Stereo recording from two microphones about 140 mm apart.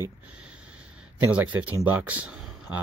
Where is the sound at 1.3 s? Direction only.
10° right (ahead or behind).